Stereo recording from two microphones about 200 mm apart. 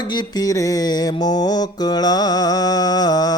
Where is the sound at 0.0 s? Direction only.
20° left (ahead or behind).